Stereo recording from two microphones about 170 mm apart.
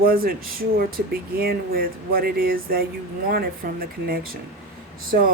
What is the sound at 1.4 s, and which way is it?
Speech, 60° right (ahead or behind).